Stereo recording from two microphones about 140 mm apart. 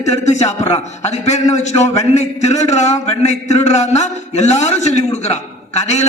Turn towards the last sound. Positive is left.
turn(degrees=55)  # may be behind; listen again after turning